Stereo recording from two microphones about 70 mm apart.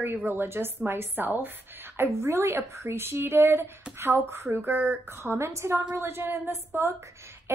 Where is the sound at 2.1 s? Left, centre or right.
Right.